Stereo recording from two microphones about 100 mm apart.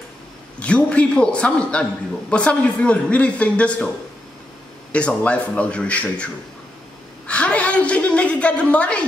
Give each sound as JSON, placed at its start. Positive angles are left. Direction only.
{"t": 0.6, "sound": "a man's voice", "side_deg": 15}
{"t": 4.9, "sound": "a man's voice", "side_deg": 10}
{"t": 7.2, "sound": "a sound", "side_deg": 10}